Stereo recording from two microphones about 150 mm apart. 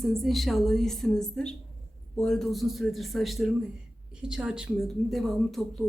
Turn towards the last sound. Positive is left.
turn(degrees=0)  # may be behind; listen again after turning